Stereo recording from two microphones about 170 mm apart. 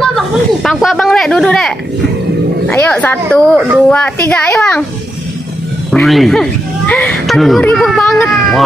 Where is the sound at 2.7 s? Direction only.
10° left (ahead or behind).